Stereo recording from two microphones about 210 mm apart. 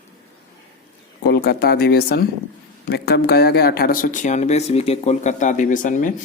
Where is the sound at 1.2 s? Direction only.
50° left (ahead or behind).